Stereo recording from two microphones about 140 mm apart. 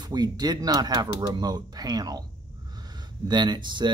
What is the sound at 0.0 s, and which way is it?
Speech, 30° right (ahead or behind).